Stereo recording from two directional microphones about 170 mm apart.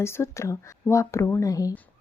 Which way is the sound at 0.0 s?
15° left (ahead or behind).